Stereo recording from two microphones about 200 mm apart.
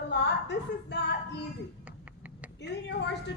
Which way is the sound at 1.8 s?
5° right (ahead or behind).